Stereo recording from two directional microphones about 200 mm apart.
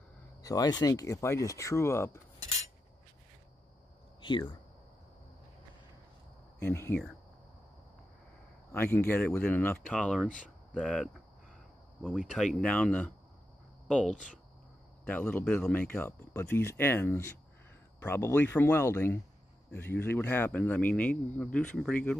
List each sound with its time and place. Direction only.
0.4 s speech: 20° left (ahead or behind)
4.2 s speech: 25° left (ahead or behind)
6.6 s speech: 10° left (ahead or behind)
8.7 s speech: 10° left (ahead or behind)
12.5 s speech: 5° left (ahead or behind)